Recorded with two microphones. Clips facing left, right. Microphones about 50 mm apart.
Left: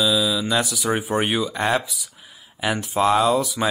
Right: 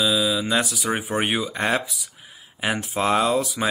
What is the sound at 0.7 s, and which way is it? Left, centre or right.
Speech, centre.